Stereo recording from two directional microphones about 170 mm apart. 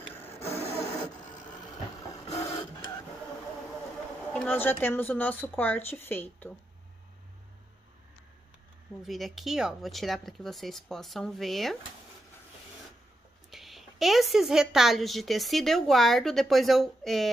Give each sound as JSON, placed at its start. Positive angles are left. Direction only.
{"t": 0.2, "sound": "music", "side_deg": 35}
{"t": 4.3, "sound": "speech", "side_deg": 10}
{"t": 9.0, "sound": "a woman's voice", "side_deg": 0}
{"t": 13.5, "sound": "a woman's voice", "side_deg": 0}